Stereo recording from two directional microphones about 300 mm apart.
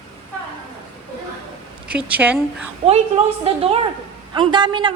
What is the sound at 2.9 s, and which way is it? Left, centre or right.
A woman's voice, centre.